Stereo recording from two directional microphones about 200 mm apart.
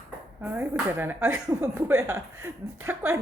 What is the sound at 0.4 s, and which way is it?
Speech, 10° right (ahead or behind).